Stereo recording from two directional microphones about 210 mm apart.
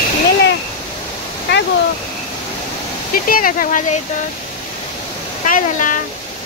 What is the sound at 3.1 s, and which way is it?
Speech, 40° left (ahead or behind).